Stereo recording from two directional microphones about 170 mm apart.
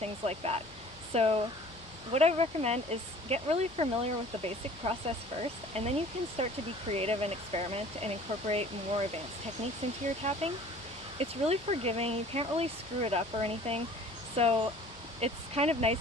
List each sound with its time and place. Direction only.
0.0 s speech: 35° right (ahead or behind)